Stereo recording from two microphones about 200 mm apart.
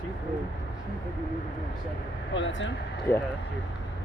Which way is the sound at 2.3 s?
65° left (ahead or behind).